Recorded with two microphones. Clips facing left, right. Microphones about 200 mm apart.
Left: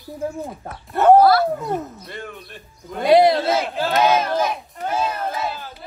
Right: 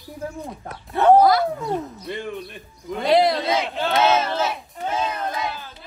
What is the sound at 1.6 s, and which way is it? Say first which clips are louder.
Speech: even; centre (ahead or behind).